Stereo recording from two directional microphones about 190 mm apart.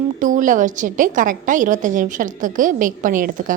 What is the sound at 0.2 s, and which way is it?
A woman's voice, 45° right (ahead or behind).